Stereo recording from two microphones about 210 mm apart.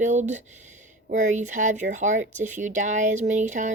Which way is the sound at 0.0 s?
35° right (ahead or behind).